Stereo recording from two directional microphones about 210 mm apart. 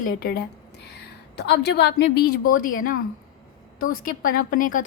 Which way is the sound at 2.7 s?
40° left (ahead or behind).